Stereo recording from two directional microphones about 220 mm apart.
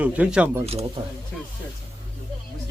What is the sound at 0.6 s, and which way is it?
Speech, 25° right (ahead or behind).